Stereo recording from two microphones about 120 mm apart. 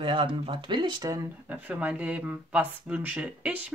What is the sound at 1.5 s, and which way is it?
Speech, 15° right (ahead or behind).